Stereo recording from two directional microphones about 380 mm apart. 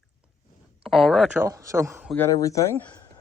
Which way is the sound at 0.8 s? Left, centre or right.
Centre.